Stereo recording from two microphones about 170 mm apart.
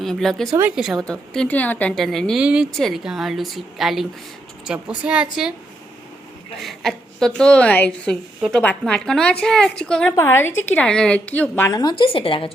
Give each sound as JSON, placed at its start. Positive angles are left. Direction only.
{"t": 0.0, "sound": "a woman's voice", "side_deg": 0}
{"t": 6.6, "sound": "a woman's voice", "side_deg": 0}